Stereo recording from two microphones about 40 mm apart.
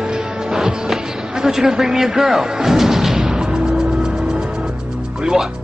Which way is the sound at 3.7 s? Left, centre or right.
Centre.